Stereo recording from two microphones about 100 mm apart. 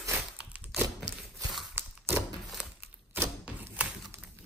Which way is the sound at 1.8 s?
20° right (ahead or behind).